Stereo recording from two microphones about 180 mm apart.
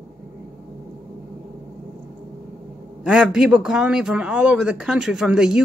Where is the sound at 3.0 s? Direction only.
5° right (ahead or behind).